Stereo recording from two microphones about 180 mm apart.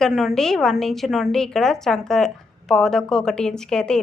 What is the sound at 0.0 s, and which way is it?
A woman's voice, centre (ahead or behind).